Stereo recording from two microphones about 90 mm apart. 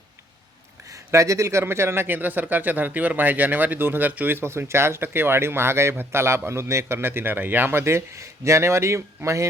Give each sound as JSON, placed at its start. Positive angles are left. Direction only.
{"t": 0.9, "sound": "a man's voice", "side_deg": -35}